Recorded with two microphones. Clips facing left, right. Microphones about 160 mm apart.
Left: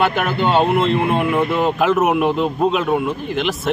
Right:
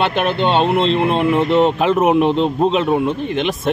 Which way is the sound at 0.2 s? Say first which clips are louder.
Right 1 dB; 25° right (ahead or behind).